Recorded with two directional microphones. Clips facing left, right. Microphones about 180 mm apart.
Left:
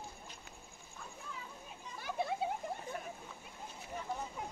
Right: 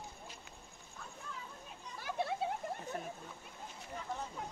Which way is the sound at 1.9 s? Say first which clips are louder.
Even; centre (ahead or behind).